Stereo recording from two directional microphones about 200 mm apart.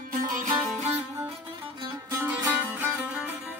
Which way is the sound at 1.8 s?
10° right (ahead or behind).